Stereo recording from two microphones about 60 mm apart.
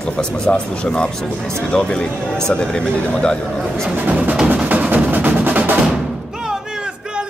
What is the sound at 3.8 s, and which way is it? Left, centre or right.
Speech, right.